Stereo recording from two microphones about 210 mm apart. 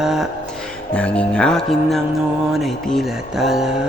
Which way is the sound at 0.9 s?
5° left (ahead or behind).